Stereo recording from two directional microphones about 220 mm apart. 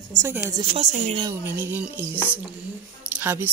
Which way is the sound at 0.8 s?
25° right (ahead or behind).